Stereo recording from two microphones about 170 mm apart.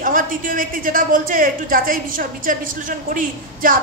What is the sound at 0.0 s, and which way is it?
A woman's voice, 55° right (ahead or behind).